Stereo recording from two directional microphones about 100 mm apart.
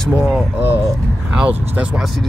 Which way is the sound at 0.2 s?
Centre (ahead or behind).